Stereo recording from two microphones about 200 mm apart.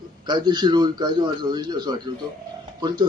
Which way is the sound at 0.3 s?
20° right (ahead or behind).